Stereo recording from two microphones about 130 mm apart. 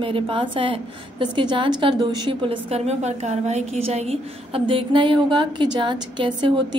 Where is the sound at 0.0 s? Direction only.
45° right (ahead or behind).